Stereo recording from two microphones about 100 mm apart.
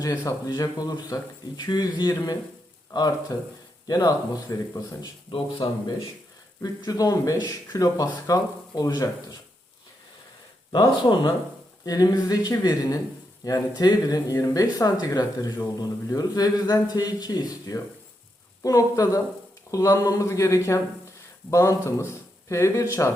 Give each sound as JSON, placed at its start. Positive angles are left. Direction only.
{"t": 0.0, "sound": "a man's voice", "side_deg": 35}
{"t": 5.3, "sound": "a man's voice", "side_deg": 60}
{"t": 6.6, "sound": "a man's voice", "side_deg": 40}
{"t": 10.7, "sound": "a man's voice", "side_deg": 50}